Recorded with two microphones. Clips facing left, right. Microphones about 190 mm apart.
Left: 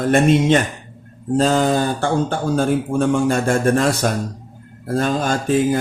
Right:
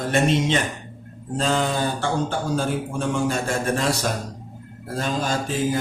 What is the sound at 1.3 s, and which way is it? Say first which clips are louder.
A man's voice: left 7 dB; 45° left (ahead or behind).